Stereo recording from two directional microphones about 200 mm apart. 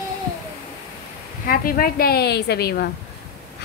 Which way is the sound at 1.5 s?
45° left (ahead or behind).